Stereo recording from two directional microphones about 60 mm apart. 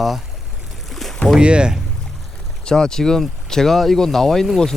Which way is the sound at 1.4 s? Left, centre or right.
Centre.